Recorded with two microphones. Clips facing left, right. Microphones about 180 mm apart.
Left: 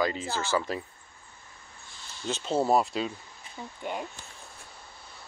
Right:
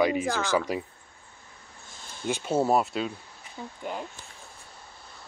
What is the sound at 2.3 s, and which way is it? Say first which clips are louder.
Speech: right 1 dB; 10° right (ahead or behind).